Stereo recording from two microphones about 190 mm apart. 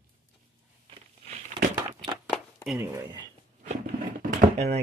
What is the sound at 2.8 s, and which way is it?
Speech, 15° right (ahead or behind).